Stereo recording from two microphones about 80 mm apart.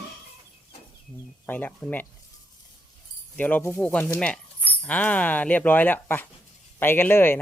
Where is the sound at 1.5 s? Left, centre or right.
Left.